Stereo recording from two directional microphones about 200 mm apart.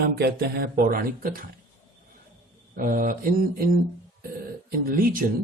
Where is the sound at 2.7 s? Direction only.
45° right (ahead or behind).